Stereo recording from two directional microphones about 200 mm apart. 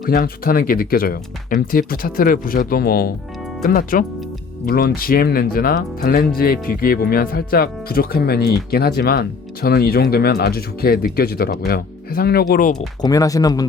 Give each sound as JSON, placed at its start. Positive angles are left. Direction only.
{"t": 0.0, "sound": "speech", "side_deg": 45}
{"t": 13.0, "sound": "speech", "side_deg": 20}